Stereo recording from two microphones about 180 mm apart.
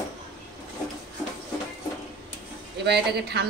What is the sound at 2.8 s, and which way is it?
Speech, 65° right (ahead or behind).